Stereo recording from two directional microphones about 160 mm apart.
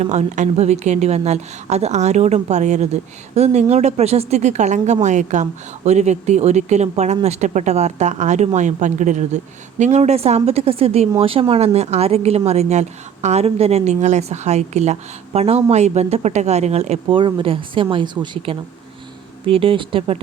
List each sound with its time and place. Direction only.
0.0 s speech: 45° right (ahead or behind)